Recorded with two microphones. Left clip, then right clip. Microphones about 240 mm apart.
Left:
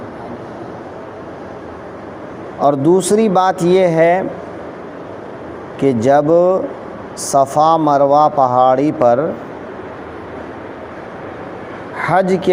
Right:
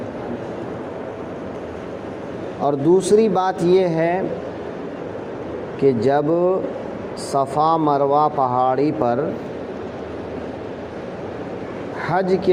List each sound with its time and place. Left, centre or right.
2.6 s a man's voice: left
5.8 s a man's voice: left
11.9 s speech: left